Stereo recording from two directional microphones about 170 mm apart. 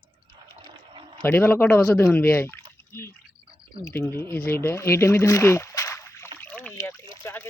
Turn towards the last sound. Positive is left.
turn(degrees=15)  # may be behind; listen again after turning